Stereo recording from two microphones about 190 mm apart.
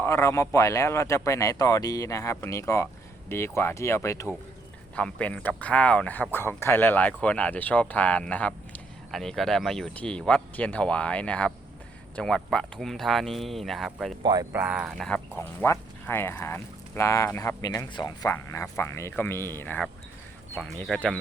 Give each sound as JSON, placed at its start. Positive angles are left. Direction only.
{"t": 0.0, "sound": "speech", "side_deg": 15}
{"t": 14.2, "sound": "speech", "side_deg": -20}
{"t": 14.5, "sound": "speech", "side_deg": -5}